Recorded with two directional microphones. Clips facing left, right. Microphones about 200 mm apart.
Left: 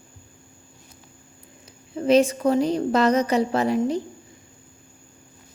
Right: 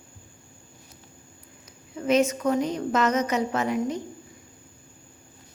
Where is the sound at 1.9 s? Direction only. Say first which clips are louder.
Left 4 dB; 30° left (ahead or behind).